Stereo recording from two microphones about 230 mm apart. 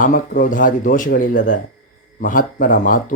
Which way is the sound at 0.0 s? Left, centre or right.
Left.